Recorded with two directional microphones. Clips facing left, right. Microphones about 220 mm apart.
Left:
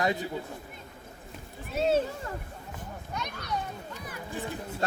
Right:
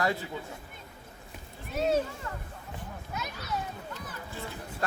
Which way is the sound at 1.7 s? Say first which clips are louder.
Left 2 dB; 30° left (ahead or behind).